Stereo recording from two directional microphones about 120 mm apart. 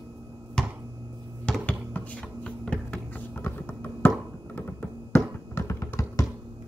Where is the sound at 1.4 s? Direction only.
10° left (ahead or behind).